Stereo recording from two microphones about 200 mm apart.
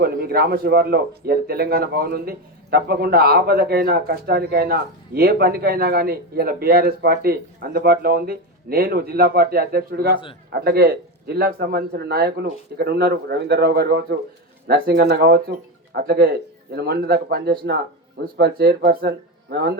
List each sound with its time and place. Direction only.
0.0 s speech: 50° right (ahead or behind)